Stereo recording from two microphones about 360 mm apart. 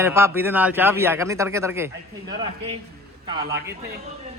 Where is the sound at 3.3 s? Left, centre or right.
Centre.